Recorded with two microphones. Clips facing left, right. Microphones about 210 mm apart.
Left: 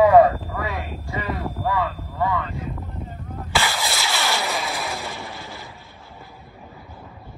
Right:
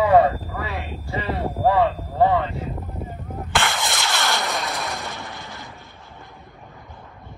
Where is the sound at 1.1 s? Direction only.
30° right (ahead or behind).